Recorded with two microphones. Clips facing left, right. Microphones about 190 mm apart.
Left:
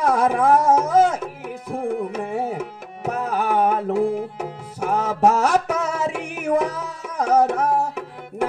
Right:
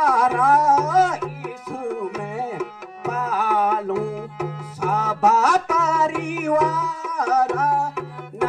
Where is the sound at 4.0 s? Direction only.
30° left (ahead or behind).